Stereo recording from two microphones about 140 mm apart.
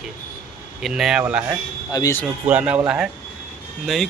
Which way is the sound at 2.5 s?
10° right (ahead or behind).